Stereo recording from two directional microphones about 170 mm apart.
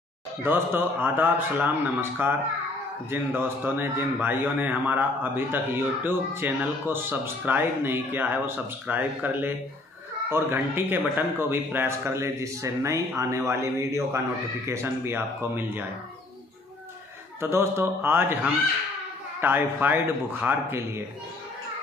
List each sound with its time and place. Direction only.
0.4 s a man's voice: 15° right (ahead or behind)
17.4 s a man's voice: 15° right (ahead or behind)